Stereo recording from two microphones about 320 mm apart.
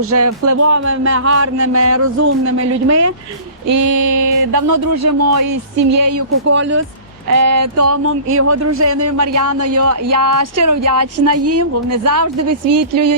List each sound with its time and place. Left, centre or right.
0.0 s speech: right
1.6 s a sound: right
2.6 s speech: right
6.5 s a sound: right
7.3 s speech: right
7.8 s speech: right
8.4 s a sound: right
8.9 s speech: right
9.1 s speech: right
9.6 s speech: right